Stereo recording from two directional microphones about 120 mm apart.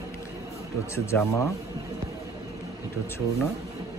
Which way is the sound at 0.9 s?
25° left (ahead or behind).